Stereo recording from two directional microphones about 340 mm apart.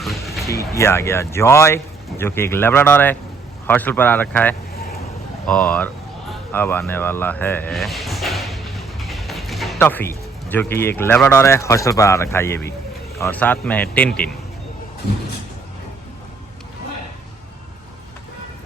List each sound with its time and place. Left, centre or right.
0.0 s speech: centre
4.7 s vehicle: left
5.5 s speech: centre